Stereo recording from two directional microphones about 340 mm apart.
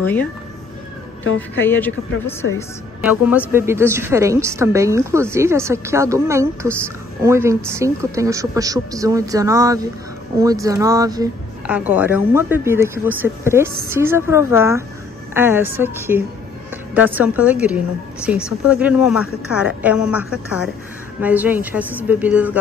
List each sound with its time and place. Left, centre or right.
0.0 s a woman's voice: centre
1.7 s a woman's voice: centre